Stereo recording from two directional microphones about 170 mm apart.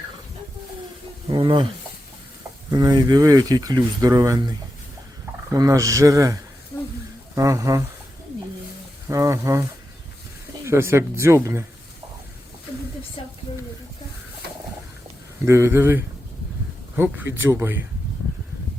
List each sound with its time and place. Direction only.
1.3 s speech: 25° right (ahead or behind)
2.6 s speech: 25° right (ahead or behind)
9.0 s speech: 15° right (ahead or behind)
10.7 s speech: 15° right (ahead or behind)
13.2 s a sound: 35° left (ahead or behind)
15.4 s speech: 15° right (ahead or behind)